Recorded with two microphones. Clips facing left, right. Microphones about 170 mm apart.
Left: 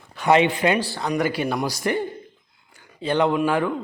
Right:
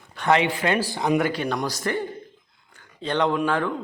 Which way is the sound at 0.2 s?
20° left (ahead or behind).